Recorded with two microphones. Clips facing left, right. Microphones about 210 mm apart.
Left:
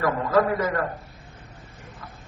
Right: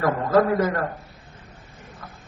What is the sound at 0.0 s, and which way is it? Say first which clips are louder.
Speech: right 2 dB; 40° right (ahead or behind).